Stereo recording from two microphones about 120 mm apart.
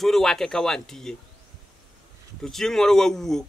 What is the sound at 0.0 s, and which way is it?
A man's voice, 5° left (ahead or behind).